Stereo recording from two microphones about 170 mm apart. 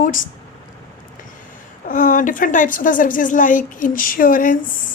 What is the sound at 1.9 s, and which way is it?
Speech, 50° left (ahead or behind).